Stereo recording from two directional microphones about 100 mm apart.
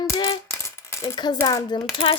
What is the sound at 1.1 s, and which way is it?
Speech, 45° left (ahead or behind).